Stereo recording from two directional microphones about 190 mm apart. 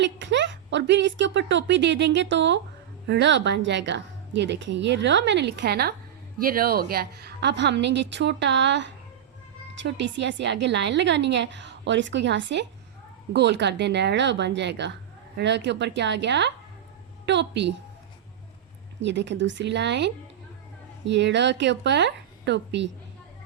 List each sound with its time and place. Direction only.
0.0 s a woman's voice: 70° right (ahead or behind)
19.0 s a woman's voice: 65° right (ahead or behind)